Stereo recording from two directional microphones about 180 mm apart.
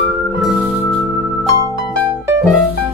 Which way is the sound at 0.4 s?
Centre (ahead or behind).